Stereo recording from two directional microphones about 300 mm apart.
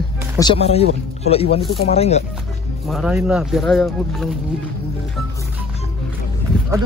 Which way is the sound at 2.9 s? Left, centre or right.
Centre.